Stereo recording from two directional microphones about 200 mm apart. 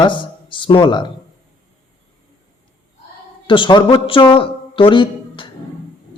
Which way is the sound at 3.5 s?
25° left (ahead or behind).